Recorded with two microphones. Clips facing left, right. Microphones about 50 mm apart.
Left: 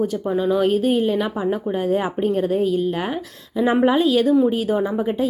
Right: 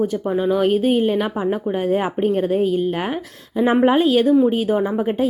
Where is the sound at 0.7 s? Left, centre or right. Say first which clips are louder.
Right 1 dB; right.